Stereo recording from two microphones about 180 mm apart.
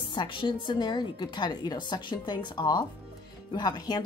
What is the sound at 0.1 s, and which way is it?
A woman's voice, 25° left (ahead or behind).